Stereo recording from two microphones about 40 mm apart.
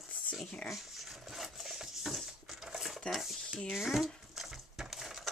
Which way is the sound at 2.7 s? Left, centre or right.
Centre.